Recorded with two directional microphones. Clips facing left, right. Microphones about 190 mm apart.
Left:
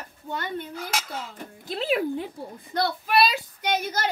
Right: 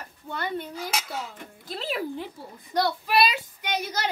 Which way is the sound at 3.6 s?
50° left (ahead or behind).